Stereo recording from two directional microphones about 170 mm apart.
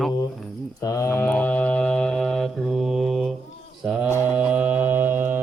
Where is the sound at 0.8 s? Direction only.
20° left (ahead or behind).